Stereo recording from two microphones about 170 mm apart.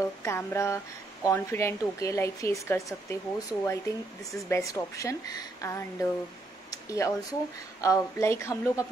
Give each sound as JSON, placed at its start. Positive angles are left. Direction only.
{"t": 0.2, "sound": "a woman's voice", "side_deg": 15}